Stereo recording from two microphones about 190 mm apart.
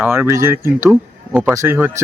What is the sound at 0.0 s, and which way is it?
Speech, 10° right (ahead or behind).